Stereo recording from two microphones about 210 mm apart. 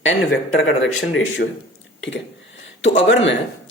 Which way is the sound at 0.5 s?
65° left (ahead or behind).